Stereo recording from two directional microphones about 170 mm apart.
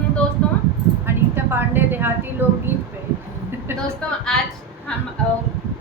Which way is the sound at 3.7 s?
15° right (ahead or behind).